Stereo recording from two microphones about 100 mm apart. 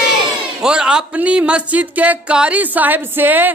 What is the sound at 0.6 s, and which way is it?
A woman's voice, 10° right (ahead or behind).